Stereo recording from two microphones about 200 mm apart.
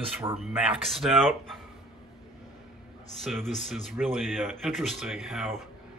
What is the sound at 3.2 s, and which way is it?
Speech, centre (ahead or behind).